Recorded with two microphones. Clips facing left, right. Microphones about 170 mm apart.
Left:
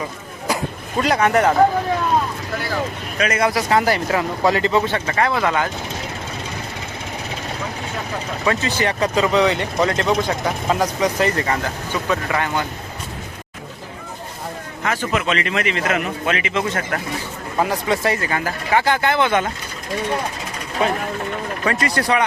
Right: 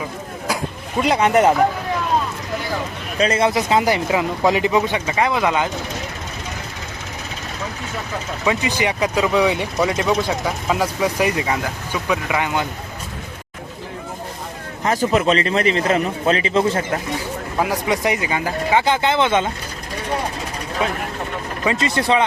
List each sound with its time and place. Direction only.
0.4 s a sound: 5° right (ahead or behind)
1.0 s speech: 20° right (ahead or behind)
3.2 s speech: 30° right (ahead or behind)
8.4 s speech: 15° right (ahead or behind)
14.8 s speech: 35° right (ahead or behind)
17.6 s speech: 15° right (ahead or behind)
21.6 s speech: 20° right (ahead or behind)